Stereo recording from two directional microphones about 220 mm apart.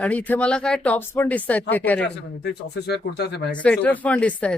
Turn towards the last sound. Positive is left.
turn(degrees=5)  # may be behind; listen again after turning